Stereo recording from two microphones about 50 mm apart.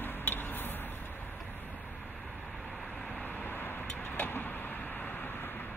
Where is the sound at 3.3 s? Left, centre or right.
Left.